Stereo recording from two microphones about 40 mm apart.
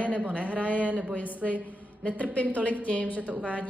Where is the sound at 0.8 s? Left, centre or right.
Right.